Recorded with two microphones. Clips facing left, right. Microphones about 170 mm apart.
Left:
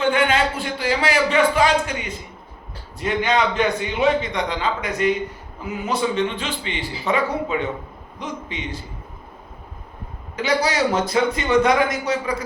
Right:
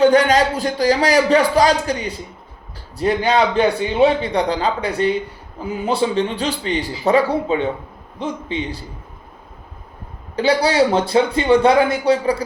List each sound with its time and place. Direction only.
0.0 s a man's voice: 40° right (ahead or behind)
10.3 s a man's voice: 30° right (ahead or behind)